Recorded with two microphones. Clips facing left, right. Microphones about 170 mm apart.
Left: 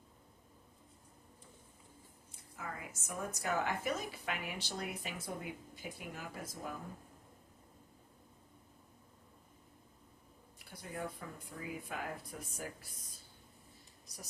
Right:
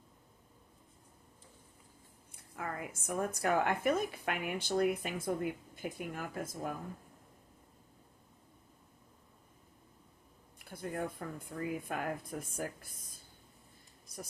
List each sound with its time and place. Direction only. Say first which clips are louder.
2.3 s a woman's voice: right 5 dB; 55° right (ahead or behind)
10.6 s a woman's voice: right 5 dB; 50° right (ahead or behind)